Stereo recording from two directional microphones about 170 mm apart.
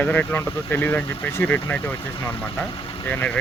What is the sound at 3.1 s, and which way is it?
Speech, 10° left (ahead or behind).